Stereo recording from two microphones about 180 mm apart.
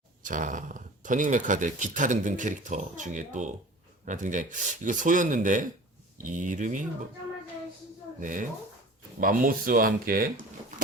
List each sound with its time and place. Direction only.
0.2 s speech: 45° right (ahead or behind)
8.2 s speech: 45° right (ahead or behind)